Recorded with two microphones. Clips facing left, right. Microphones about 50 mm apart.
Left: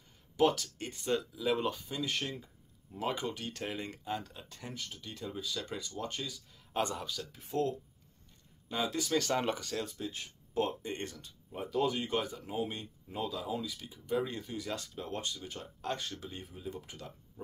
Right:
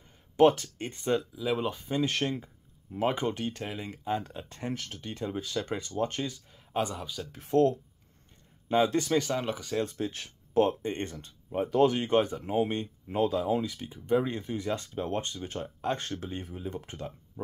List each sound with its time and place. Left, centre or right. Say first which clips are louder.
0.4 s speech: right 7 dB; right
1.1 s speech: right 2 dB; centre
1.8 s speech: right 9 dB; right
2.0 s speech: right 7 dB; right
3.6 s speech: right 2 dB; centre
4.0 s speech: right 6 dB; right
4.5 s speech: right 10 dB; right
4.7 s speech: right 4 dB; right
5.0 s speech: right 5 dB; right
6.7 s speech: right 3 dB; centre
7.3 s speech: right 10 dB; right
9.3 s speech: right 1 dB; centre
9.8 s speech: right 6 dB; right